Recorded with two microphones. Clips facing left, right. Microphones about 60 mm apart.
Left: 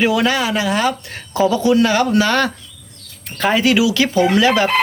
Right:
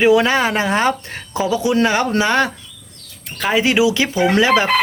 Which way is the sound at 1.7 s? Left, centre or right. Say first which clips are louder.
Left 2 dB; right.